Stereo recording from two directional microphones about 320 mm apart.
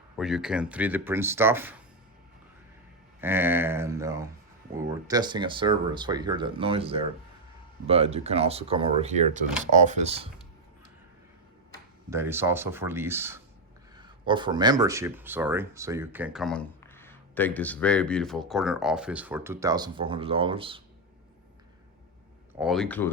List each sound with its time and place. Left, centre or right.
0.2 s speech: centre
3.2 s speech: centre
12.1 s speech: centre
22.5 s speech: centre